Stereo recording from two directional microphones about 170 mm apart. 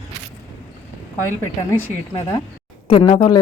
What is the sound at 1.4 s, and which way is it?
Speech, 15° left (ahead or behind).